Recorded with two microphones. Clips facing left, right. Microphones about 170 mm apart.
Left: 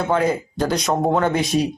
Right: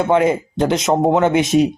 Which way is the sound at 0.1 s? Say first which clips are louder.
Right 4 dB; 25° right (ahead or behind).